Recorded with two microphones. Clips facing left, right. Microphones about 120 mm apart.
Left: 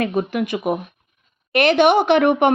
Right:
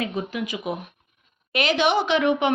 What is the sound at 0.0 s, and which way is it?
Speech, 60° left (ahead or behind).